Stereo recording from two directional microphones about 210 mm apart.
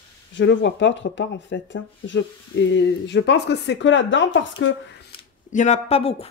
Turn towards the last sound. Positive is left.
turn(degrees=30)  # may be behind; listen again after turning